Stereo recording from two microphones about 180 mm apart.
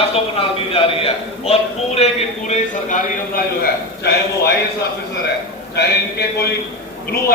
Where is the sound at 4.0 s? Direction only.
60° left (ahead or behind).